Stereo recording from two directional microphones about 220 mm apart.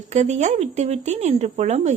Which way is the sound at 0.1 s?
30° right (ahead or behind).